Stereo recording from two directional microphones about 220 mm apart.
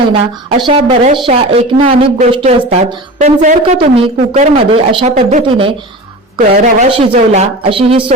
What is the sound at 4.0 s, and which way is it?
A woman's voice, 30° right (ahead or behind).